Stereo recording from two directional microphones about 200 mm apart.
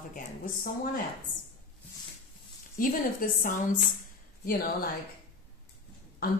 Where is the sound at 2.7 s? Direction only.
45° left (ahead or behind).